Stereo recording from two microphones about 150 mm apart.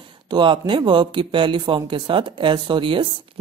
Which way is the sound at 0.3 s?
35° right (ahead or behind).